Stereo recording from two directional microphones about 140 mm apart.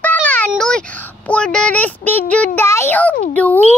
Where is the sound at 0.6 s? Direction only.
5° left (ahead or behind).